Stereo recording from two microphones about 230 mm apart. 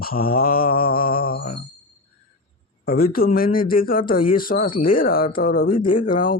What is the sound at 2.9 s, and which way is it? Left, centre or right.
Mantra, left.